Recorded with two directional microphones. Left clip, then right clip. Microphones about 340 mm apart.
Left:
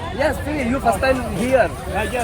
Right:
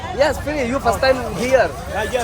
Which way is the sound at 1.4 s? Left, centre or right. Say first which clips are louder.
Even; right.